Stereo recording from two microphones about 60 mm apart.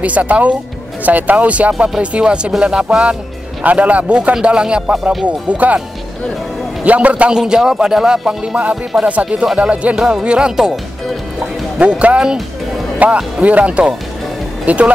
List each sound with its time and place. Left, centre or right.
0.0 s speech: right
1.7 s music: right
3.6 s speech: right
6.8 s speech: right
7.3 s music: centre
9.0 s speech: centre
9.6 s music: right
11.8 s speech: right